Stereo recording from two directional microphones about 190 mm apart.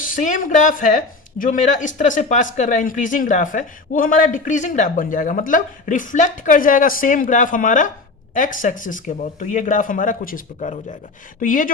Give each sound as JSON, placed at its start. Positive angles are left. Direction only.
{"t": 0.0, "sound": "speech", "side_deg": 45}